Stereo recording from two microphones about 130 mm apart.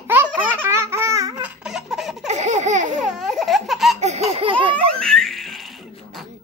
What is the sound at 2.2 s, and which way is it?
Baby laughter, 60° right (ahead or behind).